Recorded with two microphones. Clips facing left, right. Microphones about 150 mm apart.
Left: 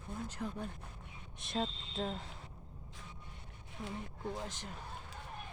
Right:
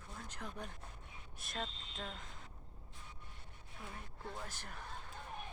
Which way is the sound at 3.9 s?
20° left (ahead or behind).